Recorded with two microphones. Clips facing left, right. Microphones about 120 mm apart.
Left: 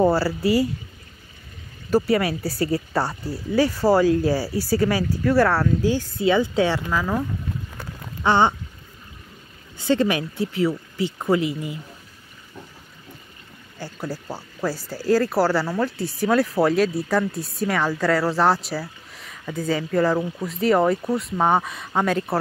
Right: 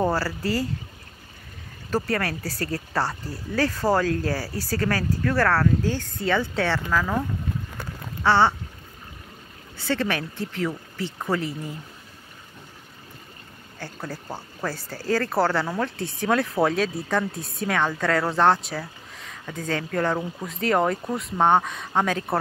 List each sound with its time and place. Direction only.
0.0 s speech: 10° left (ahead or behind)
1.9 s speech: 10° left (ahead or behind)
8.2 s a sound: 15° left (ahead or behind)
9.8 s speech: 15° left (ahead or behind)
13.7 s speech: 5° left (ahead or behind)